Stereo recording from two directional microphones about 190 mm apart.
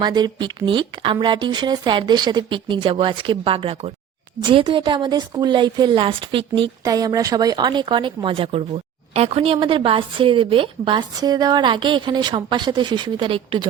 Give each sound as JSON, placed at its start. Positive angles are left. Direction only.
{"t": 0.0, "sound": "a woman's voice", "side_deg": -20}